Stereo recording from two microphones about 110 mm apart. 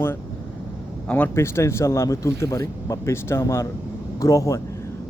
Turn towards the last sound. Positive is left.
turn(degrees=30)  # may be behind; listen again after turning